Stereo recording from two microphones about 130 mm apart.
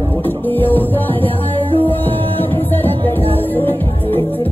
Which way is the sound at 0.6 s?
15° left (ahead or behind).